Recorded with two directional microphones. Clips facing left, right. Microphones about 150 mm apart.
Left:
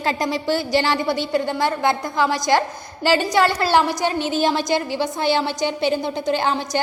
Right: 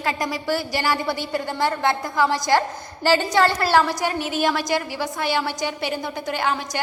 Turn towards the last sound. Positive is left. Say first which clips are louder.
# left 3 dB
turn(degrees=30)  # may be behind; listen again after turning